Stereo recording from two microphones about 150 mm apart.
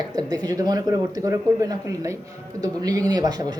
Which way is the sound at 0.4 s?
25° right (ahead or behind).